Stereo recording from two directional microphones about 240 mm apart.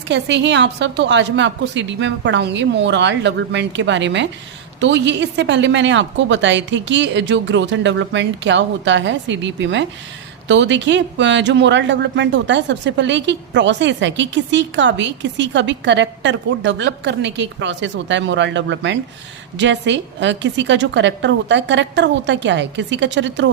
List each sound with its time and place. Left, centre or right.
0.1 s speech: right